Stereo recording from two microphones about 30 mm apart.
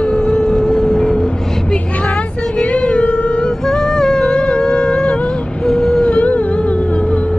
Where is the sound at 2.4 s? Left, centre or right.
Left.